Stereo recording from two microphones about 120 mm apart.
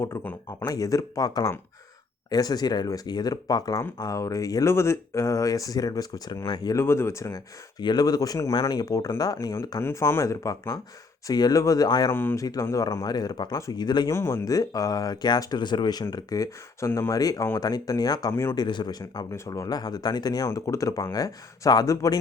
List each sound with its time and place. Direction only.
0.0 s speech: 20° left (ahead or behind)
6.8 s speech: 20° left (ahead or behind)
7.8 s speech: 35° left (ahead or behind)
12.1 s speech: 20° left (ahead or behind); by 14.1 s 35° left (ahead or behind)
14.1 s speech: 20° left (ahead or behind)